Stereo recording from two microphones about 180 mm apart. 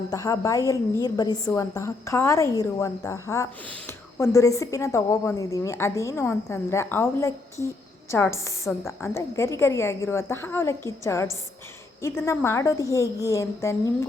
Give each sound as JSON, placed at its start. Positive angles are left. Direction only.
{"t": 0.1, "sound": "a woman's voice", "side_deg": 20}